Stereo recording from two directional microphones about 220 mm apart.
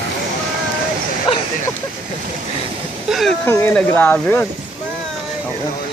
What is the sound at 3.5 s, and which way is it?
Speech, 10° left (ahead or behind).